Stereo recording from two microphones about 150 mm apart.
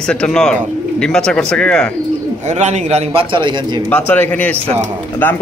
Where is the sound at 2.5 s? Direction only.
50° right (ahead or behind); by 3.8 s 30° right (ahead or behind).